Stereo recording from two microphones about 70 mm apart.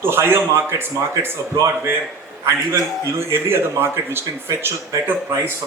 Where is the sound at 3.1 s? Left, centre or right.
Right.